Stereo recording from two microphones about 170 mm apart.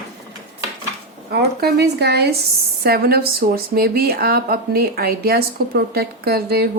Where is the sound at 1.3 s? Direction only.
70° right (ahead or behind).